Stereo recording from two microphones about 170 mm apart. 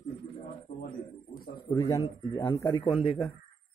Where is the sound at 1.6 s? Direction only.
15° left (ahead or behind).